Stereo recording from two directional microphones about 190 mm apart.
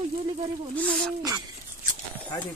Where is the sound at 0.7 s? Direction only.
5° left (ahead or behind).